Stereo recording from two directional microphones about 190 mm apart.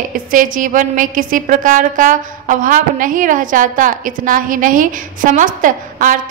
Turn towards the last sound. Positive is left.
turn(degrees=-45)  # may be behind; listen again after turning